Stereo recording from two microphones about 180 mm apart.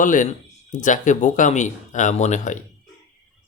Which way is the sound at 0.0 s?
45° left (ahead or behind).